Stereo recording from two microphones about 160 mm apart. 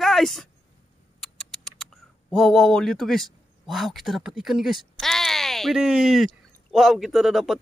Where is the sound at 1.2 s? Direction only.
5° left (ahead or behind).